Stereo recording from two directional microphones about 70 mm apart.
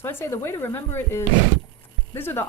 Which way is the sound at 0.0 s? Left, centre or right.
Left.